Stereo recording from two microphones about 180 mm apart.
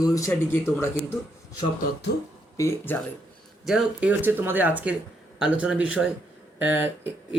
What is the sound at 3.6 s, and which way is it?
Speech, 5° right (ahead or behind).